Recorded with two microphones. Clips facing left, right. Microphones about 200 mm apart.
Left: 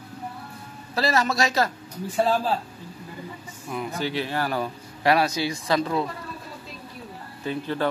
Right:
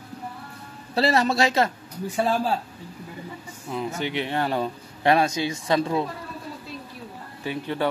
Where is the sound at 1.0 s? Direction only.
30° right (ahead or behind).